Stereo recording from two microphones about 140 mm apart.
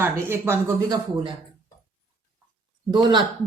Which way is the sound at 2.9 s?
30° right (ahead or behind).